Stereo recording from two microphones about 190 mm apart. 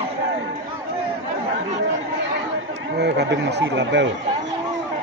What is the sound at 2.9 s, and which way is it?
Speech, 60° right (ahead or behind).